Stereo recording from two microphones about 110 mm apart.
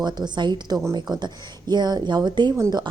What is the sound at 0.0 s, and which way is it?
A woman's voice, 40° right (ahead or behind).